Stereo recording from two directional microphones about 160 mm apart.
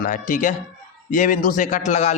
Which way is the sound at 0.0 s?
55° left (ahead or behind).